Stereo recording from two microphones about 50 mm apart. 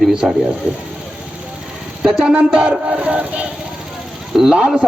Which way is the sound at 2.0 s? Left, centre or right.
Centre.